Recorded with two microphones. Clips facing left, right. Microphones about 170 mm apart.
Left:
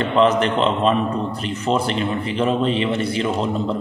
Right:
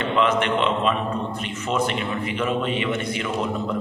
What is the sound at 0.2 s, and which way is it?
A man's voice, 35° left (ahead or behind).